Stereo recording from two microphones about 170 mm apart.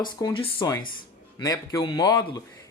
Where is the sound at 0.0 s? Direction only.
25° left (ahead or behind).